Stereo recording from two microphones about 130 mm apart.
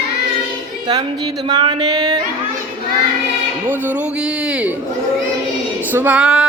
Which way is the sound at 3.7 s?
10° right (ahead or behind).